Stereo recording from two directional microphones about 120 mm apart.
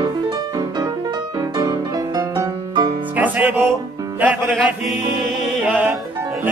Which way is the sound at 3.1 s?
15° right (ahead or behind).